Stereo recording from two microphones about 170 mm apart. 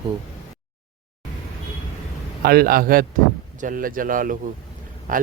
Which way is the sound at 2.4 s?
60° right (ahead or behind).